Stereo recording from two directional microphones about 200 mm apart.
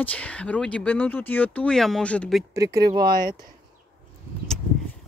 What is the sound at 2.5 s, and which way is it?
Speech, 15° right (ahead or behind).